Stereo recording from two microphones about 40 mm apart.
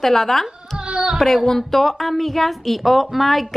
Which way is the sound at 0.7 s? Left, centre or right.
Right.